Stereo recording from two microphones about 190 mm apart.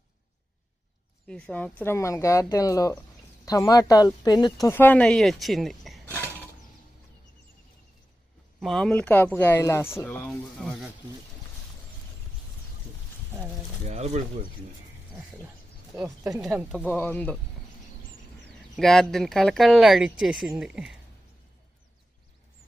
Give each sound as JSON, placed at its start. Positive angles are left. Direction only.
{"t": 1.3, "sound": "speech", "side_deg": 5}
{"t": 8.6, "sound": "speech", "side_deg": 5}
{"t": 13.8, "sound": "speech", "side_deg": -35}
{"t": 16.0, "sound": "speech", "side_deg": -15}
{"t": 16.9, "sound": "speech", "side_deg": 10}
{"t": 18.8, "sound": "speech", "side_deg": 0}